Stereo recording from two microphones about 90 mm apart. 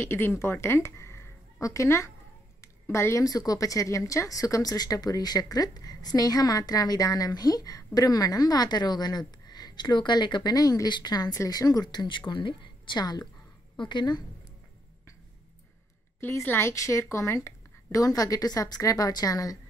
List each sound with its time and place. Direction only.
0.0 s a woman's voice: 25° left (ahead or behind); by 14.2 s 55° left (ahead or behind)
16.2 s a woman's voice: 25° left (ahead or behind); by 19.6 s 40° left (ahead or behind)